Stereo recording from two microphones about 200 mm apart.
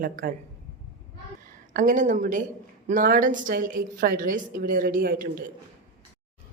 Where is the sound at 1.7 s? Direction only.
40° right (ahead or behind).